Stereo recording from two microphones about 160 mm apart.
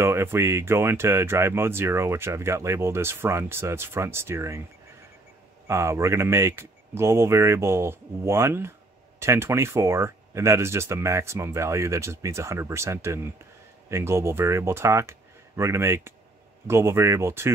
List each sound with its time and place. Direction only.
0.0 s speech: 15° right (ahead or behind)
5.7 s speech: 15° right (ahead or behind)